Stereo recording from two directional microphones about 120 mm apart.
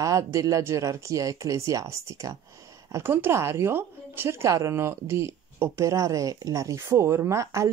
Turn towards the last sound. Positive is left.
turn(degrees=-25)  # may be behind; listen again after turning